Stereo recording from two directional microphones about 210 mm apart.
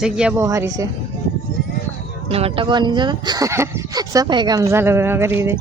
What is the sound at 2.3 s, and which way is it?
Speech, 25° right (ahead or behind).